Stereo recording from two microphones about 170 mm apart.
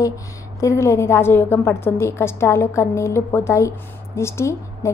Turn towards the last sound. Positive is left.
turn(degrees=15)  # may be behind; listen again after turning